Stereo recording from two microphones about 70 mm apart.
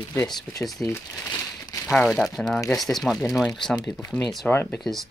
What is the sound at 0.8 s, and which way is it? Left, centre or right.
Speech, left.